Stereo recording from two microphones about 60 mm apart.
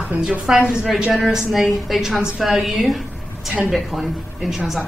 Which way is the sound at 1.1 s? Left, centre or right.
Centre.